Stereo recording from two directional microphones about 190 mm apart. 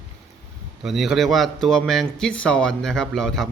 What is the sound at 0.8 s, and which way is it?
A man's voice, centre (ahead or behind).